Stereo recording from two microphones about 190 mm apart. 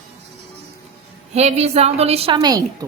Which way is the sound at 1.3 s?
35° right (ahead or behind).